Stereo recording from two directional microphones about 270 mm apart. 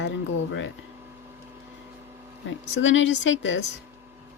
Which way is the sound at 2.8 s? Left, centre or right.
Left.